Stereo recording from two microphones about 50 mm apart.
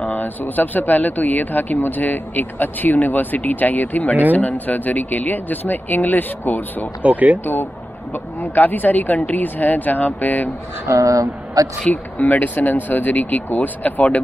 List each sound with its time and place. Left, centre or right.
0.0 s speech: left
7.0 s speech: right
8.5 s speech: left
10.9 s speech: right
11.9 s speech: left